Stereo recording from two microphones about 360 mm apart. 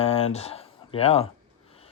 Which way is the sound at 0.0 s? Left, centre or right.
Centre.